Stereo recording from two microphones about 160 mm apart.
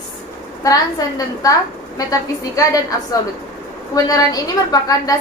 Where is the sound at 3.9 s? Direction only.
25° left (ahead or behind).